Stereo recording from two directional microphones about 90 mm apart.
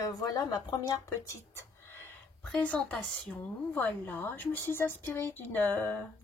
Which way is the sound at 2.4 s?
15° left (ahead or behind).